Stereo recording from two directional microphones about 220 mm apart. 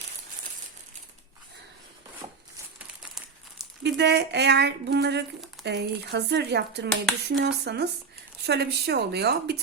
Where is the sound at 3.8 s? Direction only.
50° right (ahead or behind).